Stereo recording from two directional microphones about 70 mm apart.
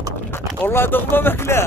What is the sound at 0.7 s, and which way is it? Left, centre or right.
Speech, left.